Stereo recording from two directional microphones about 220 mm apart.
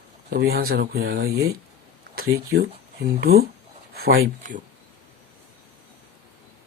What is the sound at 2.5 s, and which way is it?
Speech, 45° right (ahead or behind).